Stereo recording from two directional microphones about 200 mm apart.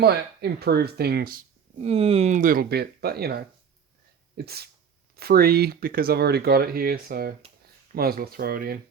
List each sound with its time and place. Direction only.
0.0 s speech: 50° right (ahead or behind)
1.8 s speech: 30° right (ahead or behind); by 8.8 s 50° right (ahead or behind)